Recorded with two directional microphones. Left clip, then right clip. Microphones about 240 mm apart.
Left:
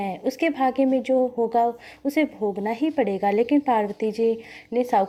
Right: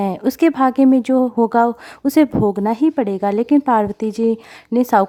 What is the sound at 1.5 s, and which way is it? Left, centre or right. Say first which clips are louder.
A woman's voice: right 6 dB; right.